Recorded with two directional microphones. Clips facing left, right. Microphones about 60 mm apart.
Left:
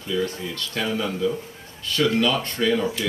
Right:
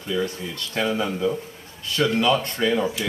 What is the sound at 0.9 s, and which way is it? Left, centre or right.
Speech, right.